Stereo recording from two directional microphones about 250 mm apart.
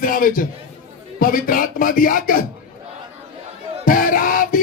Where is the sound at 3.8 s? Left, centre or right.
Left.